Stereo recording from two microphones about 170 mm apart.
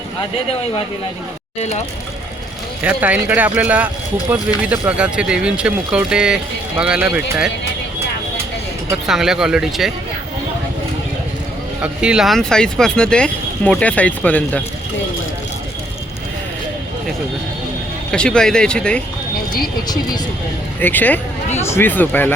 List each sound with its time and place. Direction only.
1.5 s speech: 40° left (ahead or behind)
2.8 s speech: 10° right (ahead or behind)
9.0 s speech: 5° right (ahead or behind)
11.8 s speech: 5° right (ahead or behind)
18.1 s speech: 5° left (ahead or behind)
19.9 s speech: 25° left (ahead or behind)
20.7 s speech: 10° left (ahead or behind)